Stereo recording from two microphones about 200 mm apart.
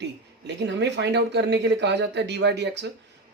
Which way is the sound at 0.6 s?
60° right (ahead or behind).